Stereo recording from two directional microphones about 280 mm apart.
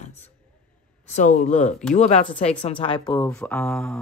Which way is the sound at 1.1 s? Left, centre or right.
Left.